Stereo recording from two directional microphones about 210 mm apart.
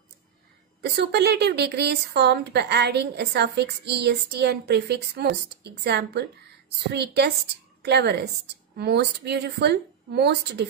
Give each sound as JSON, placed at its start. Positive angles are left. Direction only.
{"t": 0.9, "sound": "a woman's voice", "side_deg": -50}